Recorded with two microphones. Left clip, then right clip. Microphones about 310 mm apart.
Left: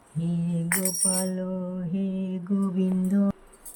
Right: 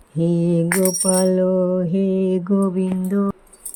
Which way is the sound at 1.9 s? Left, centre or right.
Centre.